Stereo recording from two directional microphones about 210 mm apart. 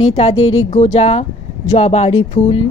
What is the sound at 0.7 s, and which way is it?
A woman's voice, 30° left (ahead or behind).